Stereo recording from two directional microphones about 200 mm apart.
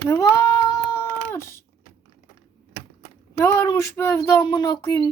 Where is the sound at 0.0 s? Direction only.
15° left (ahead or behind).